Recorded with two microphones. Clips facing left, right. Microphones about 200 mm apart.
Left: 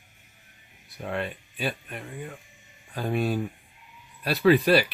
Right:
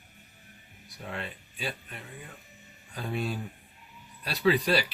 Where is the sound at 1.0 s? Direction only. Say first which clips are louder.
Left 7 dB; 60° left (ahead or behind).